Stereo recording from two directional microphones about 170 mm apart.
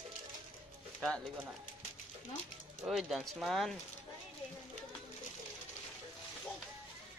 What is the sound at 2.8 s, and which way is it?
Speech, centre (ahead or behind).